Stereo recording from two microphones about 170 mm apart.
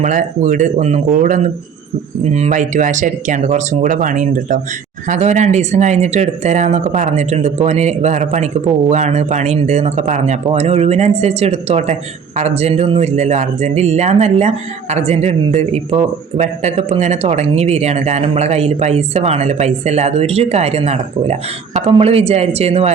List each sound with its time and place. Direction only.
0.0 s speech: 50° right (ahead or behind)